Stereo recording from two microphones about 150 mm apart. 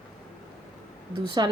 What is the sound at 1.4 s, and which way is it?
Speech, 30° right (ahead or behind).